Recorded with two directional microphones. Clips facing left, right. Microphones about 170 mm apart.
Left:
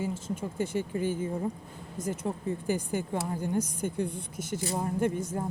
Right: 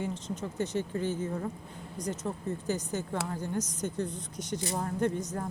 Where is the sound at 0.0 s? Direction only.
5° left (ahead or behind).